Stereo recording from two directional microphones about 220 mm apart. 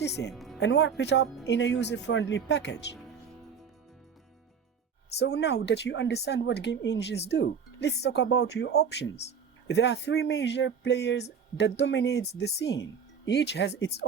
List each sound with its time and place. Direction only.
0.0 s speech: 50° left (ahead or behind)
0.3 s music: centre (ahead or behind)
0.6 s speech: 55° left (ahead or behind)
5.2 s speech: 50° left (ahead or behind)